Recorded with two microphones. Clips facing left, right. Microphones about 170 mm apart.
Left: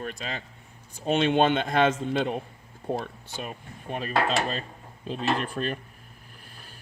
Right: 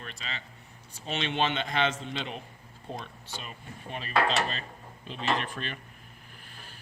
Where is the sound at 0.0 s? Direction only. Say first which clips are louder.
Left 7 dB; 50° left (ahead or behind).